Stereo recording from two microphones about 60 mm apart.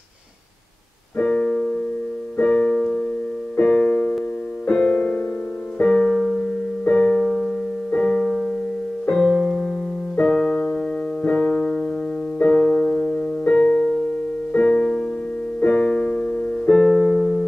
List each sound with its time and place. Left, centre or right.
1.2 s keyboard: centre
2.3 s piano: centre
2.8 s music: centre
3.5 s keyboard: centre
4.6 s piano: centre
5.9 s music: centre
7.2 s piano: centre
10.2 s music: centre
11.2 s keyboard: centre
12.5 s piano: centre
14.5 s music: centre